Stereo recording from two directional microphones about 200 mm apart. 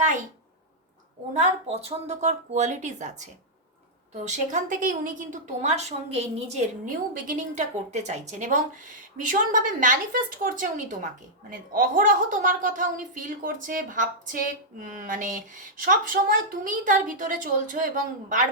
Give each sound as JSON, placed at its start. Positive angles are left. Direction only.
{"t": 1.3, "sound": "a woman's voice", "side_deg": -35}
{"t": 6.8, "sound": "a woman's voice", "side_deg": -45}